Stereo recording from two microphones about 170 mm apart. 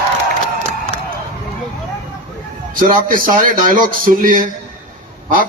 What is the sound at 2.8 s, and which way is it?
A man's voice, 55° right (ahead or behind).